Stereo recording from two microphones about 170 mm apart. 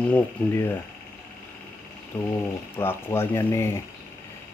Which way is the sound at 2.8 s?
15° left (ahead or behind).